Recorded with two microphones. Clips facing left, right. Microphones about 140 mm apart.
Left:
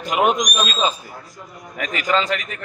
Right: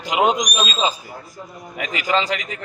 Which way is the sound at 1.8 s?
20° right (ahead or behind).